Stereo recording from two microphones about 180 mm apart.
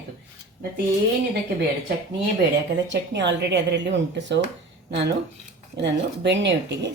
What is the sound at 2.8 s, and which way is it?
A woman's voice, 80° right.